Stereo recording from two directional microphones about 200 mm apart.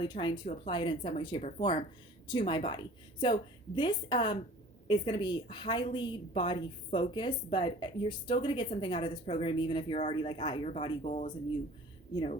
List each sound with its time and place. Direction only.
0.0 s a woman's voice: 20° left (ahead or behind); by 11.3 s 35° left (ahead or behind)
12.1 s a woman's voice: 25° left (ahead or behind)